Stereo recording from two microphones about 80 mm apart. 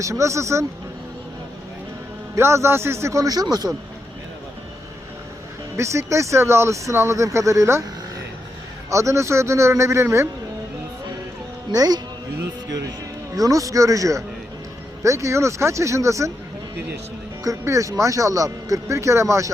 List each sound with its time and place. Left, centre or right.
0.0 s speech: right
2.3 s speech: right
5.7 s speech: right
8.9 s speech: right
11.7 s speech: right
13.3 s speech: right
17.4 s speech: right